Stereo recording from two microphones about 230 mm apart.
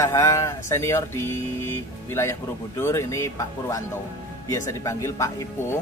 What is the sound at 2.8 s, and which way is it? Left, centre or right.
A man's voice, centre.